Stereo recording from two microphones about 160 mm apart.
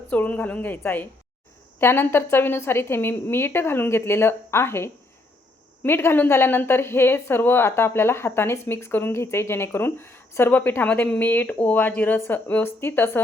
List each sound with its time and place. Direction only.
0.1 s a woman's voice: 10° left (ahead or behind)